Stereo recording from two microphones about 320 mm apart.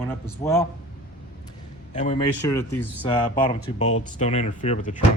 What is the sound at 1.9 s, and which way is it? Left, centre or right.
Speech, left.